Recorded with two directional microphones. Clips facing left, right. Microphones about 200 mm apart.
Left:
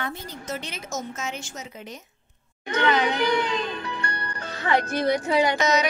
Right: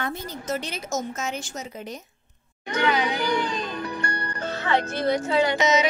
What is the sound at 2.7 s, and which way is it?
Speech, 10° right (ahead or behind).